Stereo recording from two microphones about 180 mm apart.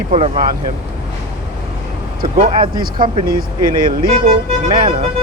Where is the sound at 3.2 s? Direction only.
55° right (ahead or behind).